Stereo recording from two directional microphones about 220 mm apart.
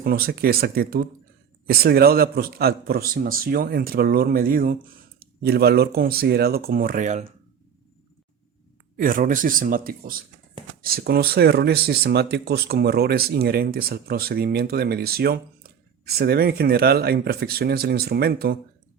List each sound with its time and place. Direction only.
0.0 s speech: 45° right (ahead or behind)
9.0 s speech: 40° right (ahead or behind)